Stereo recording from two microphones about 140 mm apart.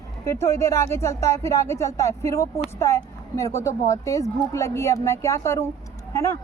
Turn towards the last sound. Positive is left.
turn(degrees=20)  # may be behind; listen again after turning